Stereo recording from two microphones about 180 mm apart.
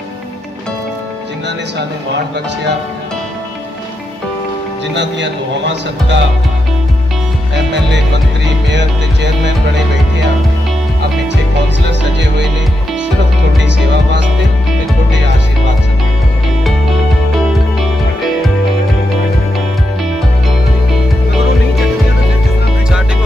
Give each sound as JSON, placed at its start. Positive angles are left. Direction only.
{"t": 4.9, "sound": "a man's voice", "side_deg": -80}
{"t": 8.6, "sound": "music", "side_deg": -75}